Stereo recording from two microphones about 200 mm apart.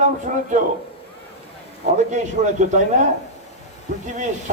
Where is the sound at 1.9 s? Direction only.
35° right (ahead or behind).